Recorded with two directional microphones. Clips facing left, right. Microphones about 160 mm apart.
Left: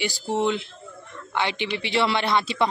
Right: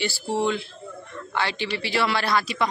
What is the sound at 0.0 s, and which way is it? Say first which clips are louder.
A woman's voice: left 1 dB; 20° left (ahead or behind).